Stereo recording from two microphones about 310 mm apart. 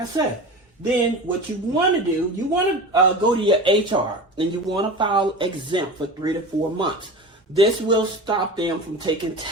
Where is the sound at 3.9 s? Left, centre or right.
Centre.